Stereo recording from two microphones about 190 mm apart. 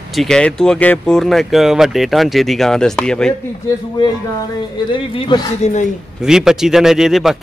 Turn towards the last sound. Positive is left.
turn(degrees=0)  # may be behind; listen again after turning